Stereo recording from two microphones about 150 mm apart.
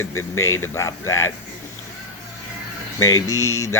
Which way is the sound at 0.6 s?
20° left (ahead or behind).